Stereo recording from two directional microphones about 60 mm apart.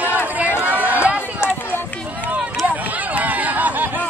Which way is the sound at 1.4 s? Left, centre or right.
Left.